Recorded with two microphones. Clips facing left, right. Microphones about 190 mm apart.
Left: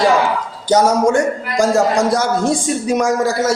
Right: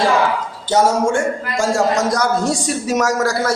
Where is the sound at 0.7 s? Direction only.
40° left (ahead or behind).